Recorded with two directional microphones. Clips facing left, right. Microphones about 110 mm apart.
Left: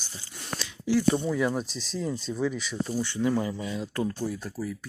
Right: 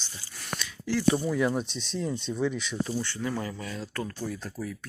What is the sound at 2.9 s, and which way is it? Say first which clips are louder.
Speech: left 5 dB; 15° left (ahead or behind).